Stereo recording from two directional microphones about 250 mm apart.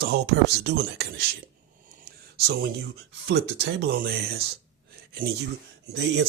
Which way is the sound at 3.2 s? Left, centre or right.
Right.